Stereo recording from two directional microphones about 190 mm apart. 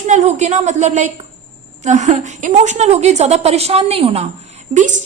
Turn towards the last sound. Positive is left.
turn(degrees=-40)  # may be behind; listen again after turning